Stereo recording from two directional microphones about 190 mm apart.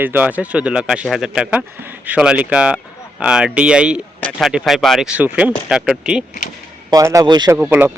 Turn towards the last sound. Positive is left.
turn(degrees=-10)  # may be behind; listen again after turning